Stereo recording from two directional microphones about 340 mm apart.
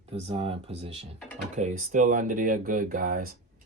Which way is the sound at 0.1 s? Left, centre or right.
Centre.